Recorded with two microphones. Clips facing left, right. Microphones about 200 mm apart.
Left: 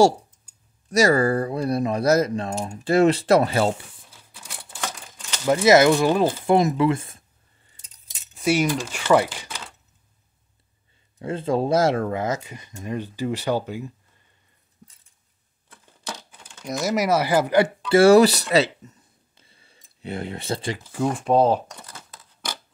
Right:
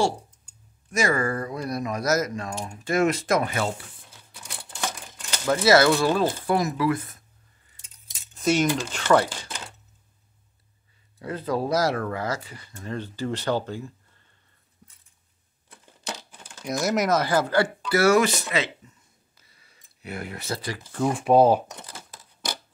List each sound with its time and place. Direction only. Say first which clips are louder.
0.8 s speech: left 6 dB; 35° left (ahead or behind)
5.5 s speech: left 3 dB; 20° left (ahead or behind)
8.4 s speech: left 1 dB; 10° left (ahead or behind)
11.1 s speech: left 4 dB; 25° left (ahead or behind)
16.6 s speech: left 1 dB; centre (ahead or behind); by 18.7 s 35° left (ahead or behind)
19.3 s a sound: left 6 dB; 25° left (ahead or behind)
20.9 s speech: right 1 dB; centre (ahead or behind)